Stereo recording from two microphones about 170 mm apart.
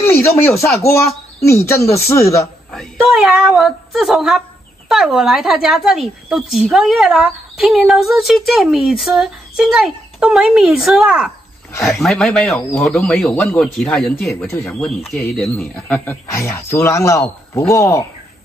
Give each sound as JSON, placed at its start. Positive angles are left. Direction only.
{"t": 0.0, "sound": "a man's voice", "side_deg": 15}
{"t": 2.7, "sound": "a man's voice", "side_deg": 0}